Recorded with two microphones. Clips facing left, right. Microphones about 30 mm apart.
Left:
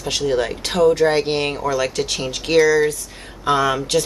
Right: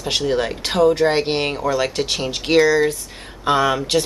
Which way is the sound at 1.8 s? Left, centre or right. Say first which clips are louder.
Right 1 dB; centre.